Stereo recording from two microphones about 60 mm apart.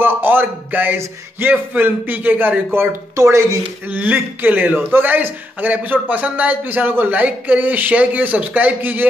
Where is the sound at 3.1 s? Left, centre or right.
Right.